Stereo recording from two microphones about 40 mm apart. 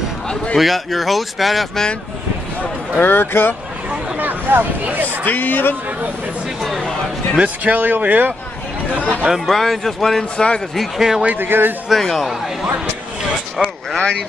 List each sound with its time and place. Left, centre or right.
0.6 s speech: centre
3.0 s speech: left
4.2 s speech: right
5.2 s speech: left
6.6 s speech: centre
7.3 s speech: right
9.0 s speech: right
9.5 s speech: centre
10.3 s speech: left
10.8 s speech: centre
11.3 s speech: right
13.6 s speech: centre
13.9 s speech: left